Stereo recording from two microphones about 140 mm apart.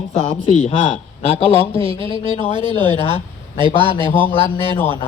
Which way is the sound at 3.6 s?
35° right (ahead or behind).